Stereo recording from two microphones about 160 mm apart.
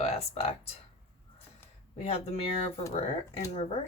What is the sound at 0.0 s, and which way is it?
Speech, 40° left (ahead or behind).